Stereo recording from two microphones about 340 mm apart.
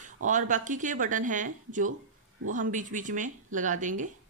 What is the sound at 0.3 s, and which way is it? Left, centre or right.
A woman's voice, right.